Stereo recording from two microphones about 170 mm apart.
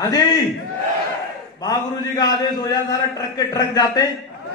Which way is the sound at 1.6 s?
25° left (ahead or behind).